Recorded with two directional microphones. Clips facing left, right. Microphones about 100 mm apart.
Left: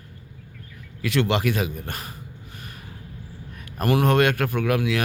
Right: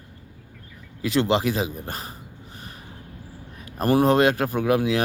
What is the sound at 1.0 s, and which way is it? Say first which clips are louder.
A man's voice: right 1 dB; 35° right (ahead or behind).